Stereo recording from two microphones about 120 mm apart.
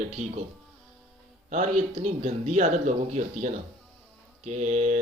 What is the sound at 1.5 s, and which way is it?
A man's voice, 85° right.